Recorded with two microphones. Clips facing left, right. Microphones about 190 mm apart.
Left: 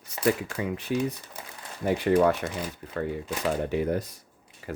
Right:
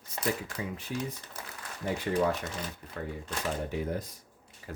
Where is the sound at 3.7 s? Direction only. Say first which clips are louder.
Left 7 dB; 75° left (ahead or behind).